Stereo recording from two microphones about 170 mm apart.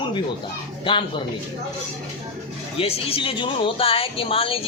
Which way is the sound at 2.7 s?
35° left (ahead or behind).